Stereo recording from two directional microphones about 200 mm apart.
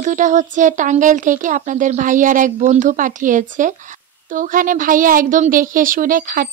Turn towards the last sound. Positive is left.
turn(degrees=-45)  # may be behind; listen again after turning